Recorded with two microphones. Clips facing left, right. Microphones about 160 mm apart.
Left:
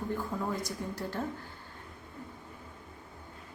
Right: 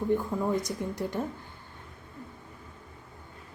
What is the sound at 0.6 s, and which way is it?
Speech, 20° right (ahead or behind).